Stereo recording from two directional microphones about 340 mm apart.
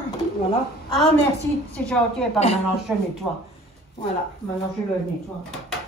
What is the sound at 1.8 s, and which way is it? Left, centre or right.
Speech, centre.